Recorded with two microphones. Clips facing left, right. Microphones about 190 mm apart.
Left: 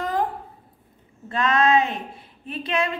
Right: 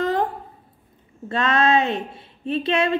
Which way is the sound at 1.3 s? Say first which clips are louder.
Even; 25° right (ahead or behind).